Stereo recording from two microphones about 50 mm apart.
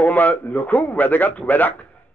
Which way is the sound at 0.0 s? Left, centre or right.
Left.